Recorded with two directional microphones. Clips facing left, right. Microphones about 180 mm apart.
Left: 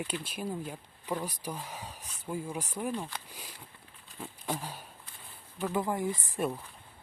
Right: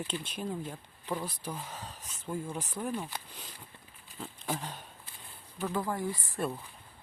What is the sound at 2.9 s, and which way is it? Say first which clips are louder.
Speech: even; 5° right (ahead or behind).